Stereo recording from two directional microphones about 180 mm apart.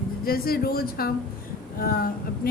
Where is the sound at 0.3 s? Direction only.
55° left (ahead or behind).